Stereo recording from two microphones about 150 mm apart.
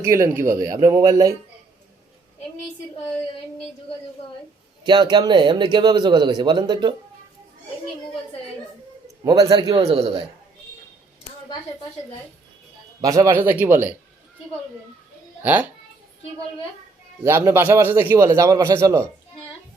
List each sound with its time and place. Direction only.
0.0 s a man's voice: 20° right (ahead or behind)
4.8 s speech: 30° right (ahead or behind)
9.2 s speech: 25° right (ahead or behind); by 10.2 s 40° right (ahead or behind)
13.0 s a man's voice: 20° right (ahead or behind)
17.2 s a man's voice: 15° right (ahead or behind)